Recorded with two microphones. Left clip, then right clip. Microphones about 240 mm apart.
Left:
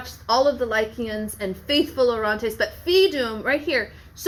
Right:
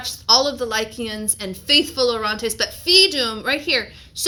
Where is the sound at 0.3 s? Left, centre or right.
Right.